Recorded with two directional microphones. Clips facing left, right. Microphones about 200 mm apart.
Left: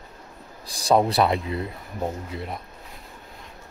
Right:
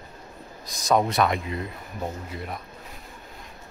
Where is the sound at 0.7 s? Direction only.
30° left (ahead or behind).